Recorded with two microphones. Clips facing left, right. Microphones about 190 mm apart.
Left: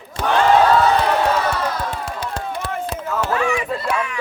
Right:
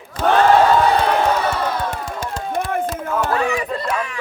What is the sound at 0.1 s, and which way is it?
Crowd, 25° left (ahead or behind).